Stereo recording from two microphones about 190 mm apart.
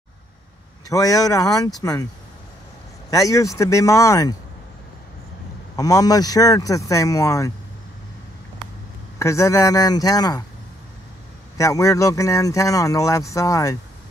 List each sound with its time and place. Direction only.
0.8 s a man's voice: 20° left (ahead or behind)
3.1 s a man's voice: 15° left (ahead or behind)
5.8 s a man's voice: 20° left (ahead or behind)
9.2 s a man's voice: 15° left (ahead or behind)
11.5 s a man's voice: 15° left (ahead or behind)